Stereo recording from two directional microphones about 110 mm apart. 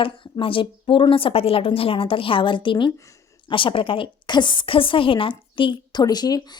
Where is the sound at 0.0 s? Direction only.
50° left (ahead or behind).